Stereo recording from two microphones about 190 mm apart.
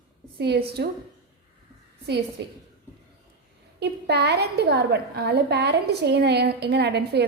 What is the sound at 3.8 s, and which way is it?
A woman's voice, 60° right (ahead or behind).